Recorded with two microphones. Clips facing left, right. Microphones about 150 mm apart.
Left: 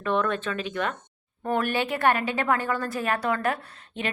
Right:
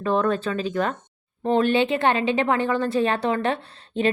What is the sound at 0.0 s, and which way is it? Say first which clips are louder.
Speech: right 4 dB; 35° right (ahead or behind).